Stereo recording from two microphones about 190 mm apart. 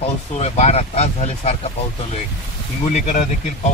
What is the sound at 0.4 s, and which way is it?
Speech, 35° left (ahead or behind).